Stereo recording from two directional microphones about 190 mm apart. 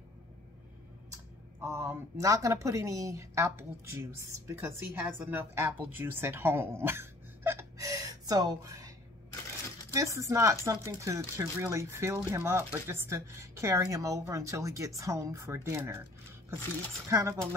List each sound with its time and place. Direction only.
1.6 s a woman's voice: 15° right (ahead or behind)
9.9 s a woman's voice: 15° right (ahead or behind)
17.1 s a woman's voice: 15° right (ahead or behind)